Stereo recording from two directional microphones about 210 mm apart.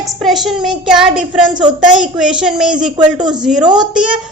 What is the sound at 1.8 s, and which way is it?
Speech, 35° right (ahead or behind).